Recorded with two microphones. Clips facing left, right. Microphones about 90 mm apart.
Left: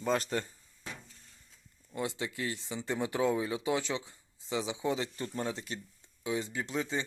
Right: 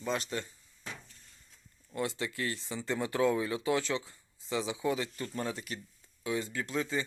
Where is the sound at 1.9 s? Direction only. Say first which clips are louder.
Right 1 dB; 20° left (ahead or behind).